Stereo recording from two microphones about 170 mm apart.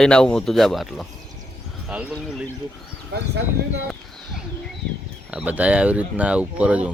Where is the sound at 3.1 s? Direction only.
70° right (ahead or behind).